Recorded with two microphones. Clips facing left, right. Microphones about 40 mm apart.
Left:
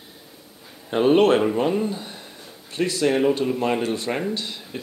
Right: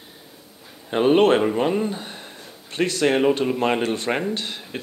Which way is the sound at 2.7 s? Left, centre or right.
Right.